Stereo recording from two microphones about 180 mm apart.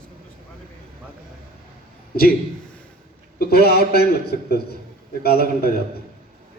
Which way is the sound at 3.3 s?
60° left (ahead or behind).